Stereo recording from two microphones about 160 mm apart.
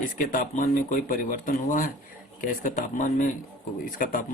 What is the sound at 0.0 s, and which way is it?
Speech, 55° left (ahead or behind).